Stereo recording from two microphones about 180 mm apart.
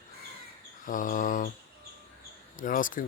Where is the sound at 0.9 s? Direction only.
50° left (ahead or behind).